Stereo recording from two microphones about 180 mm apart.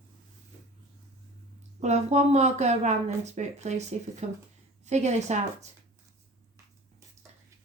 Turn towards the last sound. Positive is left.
turn(degrees=-40)  # may be behind; listen again after turning